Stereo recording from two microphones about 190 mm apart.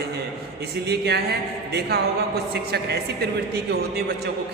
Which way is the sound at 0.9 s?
60° right (ahead or behind).